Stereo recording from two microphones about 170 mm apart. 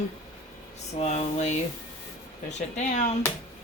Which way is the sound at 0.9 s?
40° left (ahead or behind).